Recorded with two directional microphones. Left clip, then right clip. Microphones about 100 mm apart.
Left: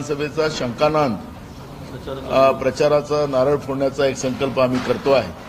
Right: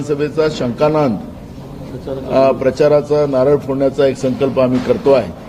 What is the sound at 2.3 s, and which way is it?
A man's voice, 35° right (ahead or behind).